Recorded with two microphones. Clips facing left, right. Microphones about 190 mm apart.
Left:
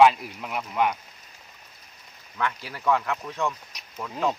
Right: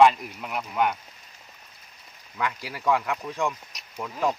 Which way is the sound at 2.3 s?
15° right (ahead or behind).